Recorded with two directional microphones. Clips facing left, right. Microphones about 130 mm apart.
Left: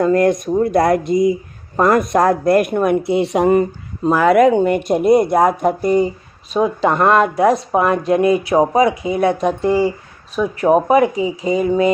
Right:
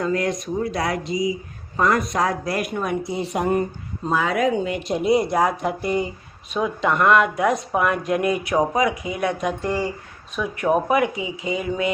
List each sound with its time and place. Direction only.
0.0 s speech: 50° left (ahead or behind); by 3.6 s 90° left
4.1 s speech: 65° left (ahead or behind); by 11.9 s 40° left (ahead or behind)